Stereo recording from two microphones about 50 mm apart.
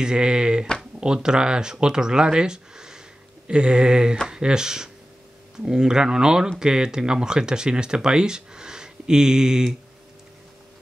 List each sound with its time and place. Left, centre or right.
0.0 s speech: centre